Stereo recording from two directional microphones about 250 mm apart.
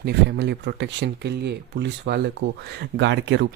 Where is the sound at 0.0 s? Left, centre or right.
Right.